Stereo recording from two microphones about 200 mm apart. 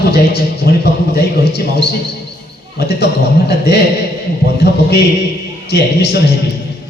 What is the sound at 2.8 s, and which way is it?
Speech, 55° left (ahead or behind).